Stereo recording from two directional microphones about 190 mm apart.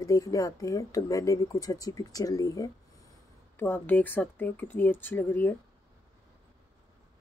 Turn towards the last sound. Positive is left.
turn(degrees=10)  # may be behind; listen again after turning